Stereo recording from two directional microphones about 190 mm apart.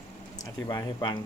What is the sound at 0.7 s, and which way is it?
Speech, 25° left (ahead or behind).